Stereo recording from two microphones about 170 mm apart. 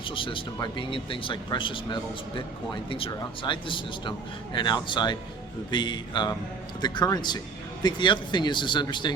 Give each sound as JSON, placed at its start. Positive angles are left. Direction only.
{"t": 0.1, "sound": "speech", "side_deg": 30}